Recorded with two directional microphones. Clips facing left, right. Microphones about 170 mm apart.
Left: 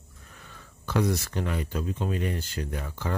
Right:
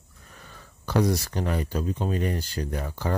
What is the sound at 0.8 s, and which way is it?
Speech, 35° right (ahead or behind).